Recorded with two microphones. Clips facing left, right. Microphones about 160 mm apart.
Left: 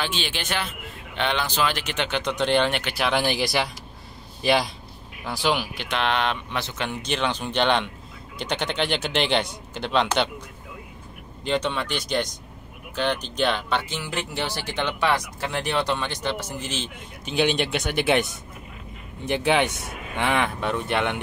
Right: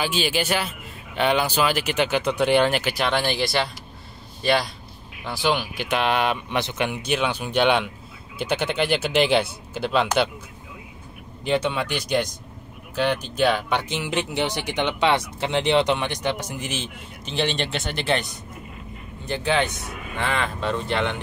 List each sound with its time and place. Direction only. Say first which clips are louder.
0.0 s a man's voice: right 5 dB; 5° right (ahead or behind)
11.4 s speech: right 2 dB; 10° right (ahead or behind)
17.2 s speech: left 3 dB; 5° left (ahead or behind)
19.2 s speech: left 2 dB; 15° left (ahead or behind)